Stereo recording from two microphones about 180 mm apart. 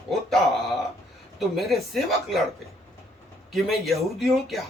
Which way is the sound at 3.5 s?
Centre (ahead or behind).